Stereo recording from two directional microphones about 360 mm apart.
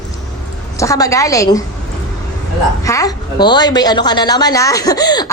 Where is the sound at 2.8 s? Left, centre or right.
Centre.